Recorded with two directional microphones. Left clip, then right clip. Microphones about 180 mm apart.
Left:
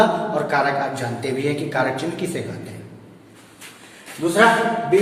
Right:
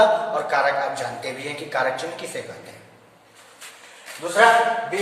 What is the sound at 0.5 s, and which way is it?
Speech, 10° left (ahead or behind).